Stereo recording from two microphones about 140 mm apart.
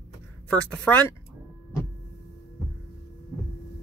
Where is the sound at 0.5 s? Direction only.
10° left (ahead or behind).